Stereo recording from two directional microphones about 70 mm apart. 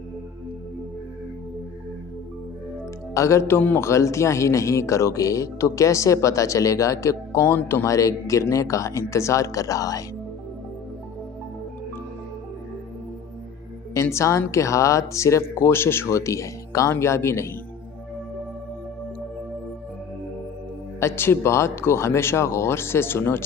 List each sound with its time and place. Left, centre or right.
3.2 s speech: left
3.8 s speech: left
7.4 s speech: left
13.9 s speech: left
16.0 s speech: left
21.2 s speech: left